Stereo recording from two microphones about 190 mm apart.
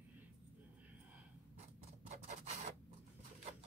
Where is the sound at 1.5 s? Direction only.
35° right (ahead or behind).